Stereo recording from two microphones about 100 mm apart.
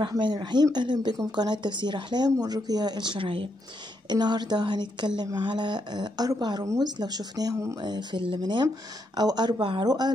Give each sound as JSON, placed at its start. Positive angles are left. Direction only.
{"t": 0.2, "sound": "speech", "side_deg": -50}
{"t": 4.1, "sound": "speech", "side_deg": -45}
{"t": 6.6, "sound": "speech", "side_deg": -30}